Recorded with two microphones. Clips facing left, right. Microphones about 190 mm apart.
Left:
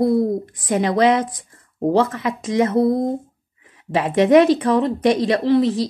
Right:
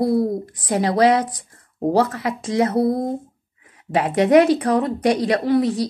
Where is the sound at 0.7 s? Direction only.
20° left (ahead or behind).